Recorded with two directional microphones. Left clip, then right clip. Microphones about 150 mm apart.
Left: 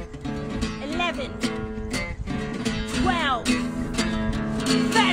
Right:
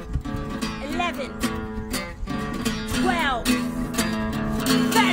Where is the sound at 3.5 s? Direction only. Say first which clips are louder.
Right 1 dB; 30° right (ahead or behind).